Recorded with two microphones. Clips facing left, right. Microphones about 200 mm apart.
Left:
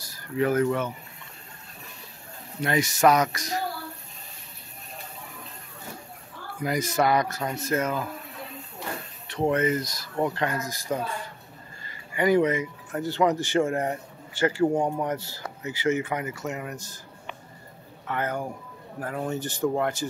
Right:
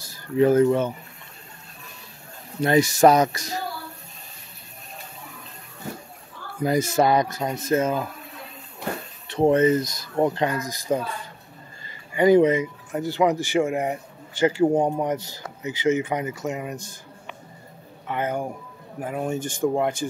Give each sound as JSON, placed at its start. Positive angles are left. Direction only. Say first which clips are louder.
{"t": 0.0, "sound": "speech", "louder": "right 6 dB", "side_deg": -25}
{"t": 2.6, "sound": "speech", "louder": "right 5 dB", "side_deg": -35}
{"t": 6.6, "sound": "speech", "louder": "right 4 dB", "side_deg": -25}
{"t": 9.3, "sound": "speech", "louder": "right 6 dB", "side_deg": -25}
{"t": 12.1, "sound": "speech", "louder": "right 5 dB", "side_deg": -25}
{"t": 18.0, "sound": "speech", "louder": "right 3 dB", "side_deg": -20}